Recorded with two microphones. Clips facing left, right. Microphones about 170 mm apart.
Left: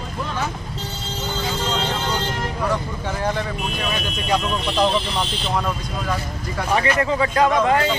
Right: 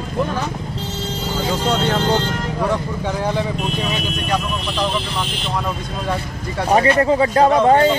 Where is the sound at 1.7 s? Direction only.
65° right (ahead or behind).